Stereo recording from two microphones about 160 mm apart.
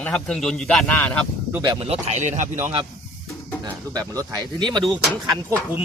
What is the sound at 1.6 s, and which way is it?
Speech, 25° right (ahead or behind).